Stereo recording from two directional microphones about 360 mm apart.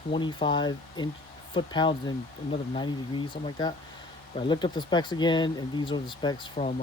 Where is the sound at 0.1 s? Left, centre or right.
Centre.